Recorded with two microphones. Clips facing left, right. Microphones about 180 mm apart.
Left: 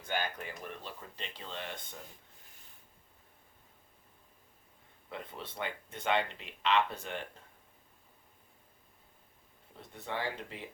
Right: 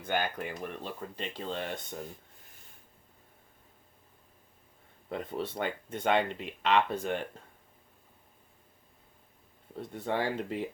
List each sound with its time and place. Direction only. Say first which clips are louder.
0.0 s speech: right 5 dB; 55° right (ahead or behind)
5.0 s speech: right 9 dB; 45° right (ahead or behind)
9.9 s speech: right 6 dB; 50° right (ahead or behind)